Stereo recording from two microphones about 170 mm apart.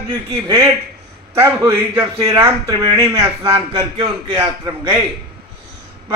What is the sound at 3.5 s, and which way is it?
A man's voice, 30° right (ahead or behind).